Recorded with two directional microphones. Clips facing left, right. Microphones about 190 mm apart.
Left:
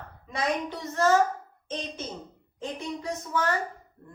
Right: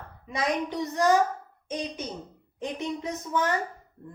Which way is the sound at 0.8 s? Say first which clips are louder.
Even; 15° right (ahead or behind).